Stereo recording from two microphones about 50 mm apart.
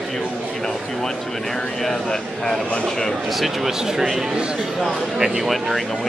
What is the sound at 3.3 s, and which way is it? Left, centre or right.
A man's voice, centre.